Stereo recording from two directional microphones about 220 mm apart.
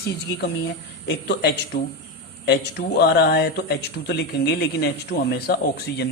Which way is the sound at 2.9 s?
45° left (ahead or behind).